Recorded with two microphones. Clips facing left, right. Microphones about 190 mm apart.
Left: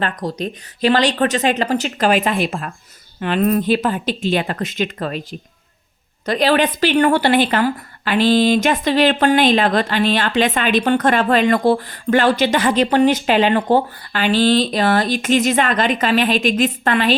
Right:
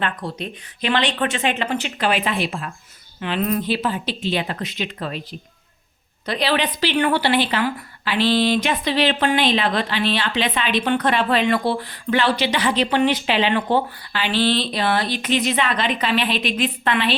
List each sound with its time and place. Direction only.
0.0 s a woman's voice: 40° left (ahead or behind)
6.2 s a woman's voice: 45° left (ahead or behind)